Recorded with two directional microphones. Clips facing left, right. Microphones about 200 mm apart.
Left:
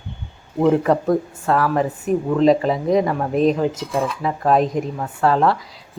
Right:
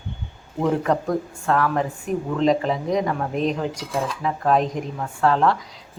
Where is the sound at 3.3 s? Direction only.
40° left (ahead or behind).